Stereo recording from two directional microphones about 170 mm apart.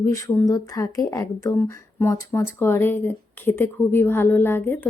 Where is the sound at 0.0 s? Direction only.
15° left (ahead or behind).